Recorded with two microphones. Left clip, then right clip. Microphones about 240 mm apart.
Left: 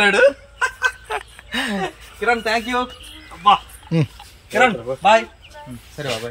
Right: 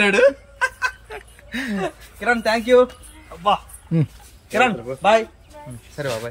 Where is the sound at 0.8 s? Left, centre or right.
Centre.